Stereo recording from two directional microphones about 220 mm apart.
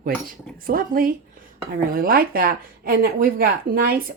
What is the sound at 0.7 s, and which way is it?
Speech, 40° right (ahead or behind).